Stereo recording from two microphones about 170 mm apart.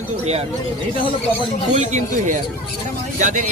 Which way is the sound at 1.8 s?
45° right (ahead or behind).